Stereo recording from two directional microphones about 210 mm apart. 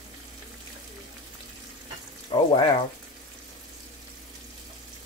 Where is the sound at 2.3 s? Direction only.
20° left (ahead or behind).